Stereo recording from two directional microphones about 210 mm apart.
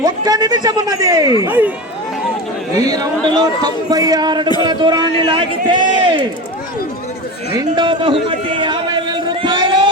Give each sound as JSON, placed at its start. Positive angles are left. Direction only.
{"t": 0.0, "sound": "a man's voice", "side_deg": -20}
{"t": 2.8, "sound": "a man's voice", "side_deg": -20}
{"t": 7.5, "sound": "a sound", "side_deg": -20}